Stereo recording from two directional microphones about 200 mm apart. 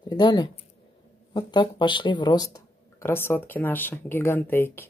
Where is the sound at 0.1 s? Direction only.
20° left (ahead or behind).